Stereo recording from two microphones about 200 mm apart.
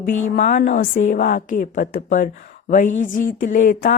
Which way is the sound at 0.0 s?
40° left (ahead or behind).